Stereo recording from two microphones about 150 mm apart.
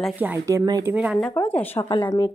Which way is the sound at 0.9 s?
10° right (ahead or behind).